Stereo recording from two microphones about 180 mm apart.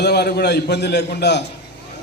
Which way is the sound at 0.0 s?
65° left (ahead or behind).